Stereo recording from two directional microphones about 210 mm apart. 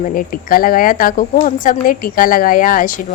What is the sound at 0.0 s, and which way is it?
A woman's voice, 40° left (ahead or behind).